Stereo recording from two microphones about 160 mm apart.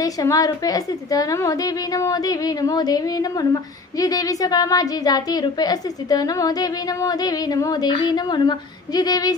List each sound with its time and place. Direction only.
0.0 s a woman's voice: 20° left (ahead or behind)